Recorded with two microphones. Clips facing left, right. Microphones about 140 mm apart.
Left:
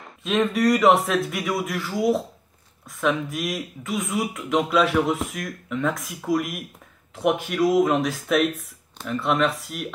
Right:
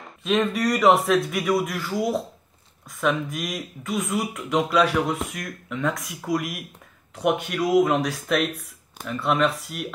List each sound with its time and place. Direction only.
0.2 s speech: centre (ahead or behind)